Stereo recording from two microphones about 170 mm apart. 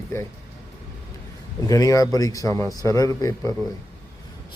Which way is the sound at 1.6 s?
20° left (ahead or behind).